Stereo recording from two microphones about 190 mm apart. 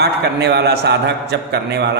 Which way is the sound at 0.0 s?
60° right (ahead or behind).